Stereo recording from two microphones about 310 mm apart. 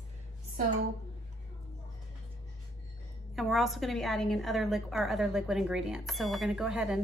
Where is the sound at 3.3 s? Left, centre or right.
Centre.